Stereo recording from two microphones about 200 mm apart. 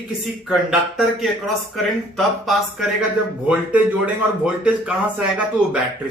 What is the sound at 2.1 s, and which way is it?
A man's voice, centre (ahead or behind).